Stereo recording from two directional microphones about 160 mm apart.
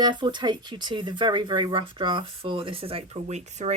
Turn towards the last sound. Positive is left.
turn(degrees=-45)  # may be behind; listen again after turning